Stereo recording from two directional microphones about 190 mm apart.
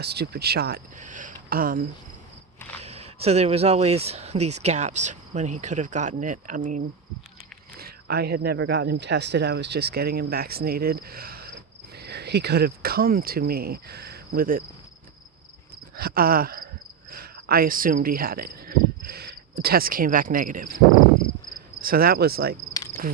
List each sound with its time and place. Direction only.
0.0 s speech: 60° right (ahead or behind)
0.9 s speech: 40° right (ahead or behind)
2.8 s speech: 35° right (ahead or behind)
7.8 s speech: 55° right (ahead or behind)
16.0 s speech: 55° right (ahead or behind)
17.1 s cricket: 50° right (ahead or behind)
21.8 s speech: 50° right (ahead or behind)
22.9 s cricket: 50° right (ahead or behind)